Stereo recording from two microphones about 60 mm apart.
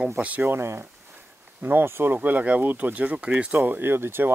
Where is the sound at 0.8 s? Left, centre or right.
Right.